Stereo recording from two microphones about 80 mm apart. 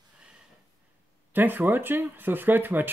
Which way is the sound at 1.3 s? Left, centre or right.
Right.